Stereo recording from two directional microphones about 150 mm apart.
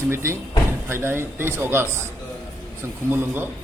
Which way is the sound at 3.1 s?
15° right (ahead or behind).